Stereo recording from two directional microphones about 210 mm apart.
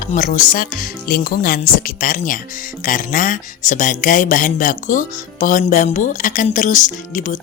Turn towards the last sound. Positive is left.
turn(degrees=35)  # may be behind; listen again after turning